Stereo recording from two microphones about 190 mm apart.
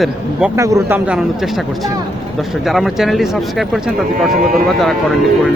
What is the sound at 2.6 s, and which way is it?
A man's voice, centre (ahead or behind).